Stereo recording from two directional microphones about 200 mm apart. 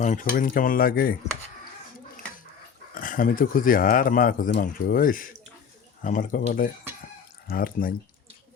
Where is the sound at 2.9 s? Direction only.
45° left (ahead or behind).